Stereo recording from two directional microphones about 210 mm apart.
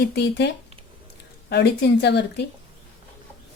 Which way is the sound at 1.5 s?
55° left (ahead or behind).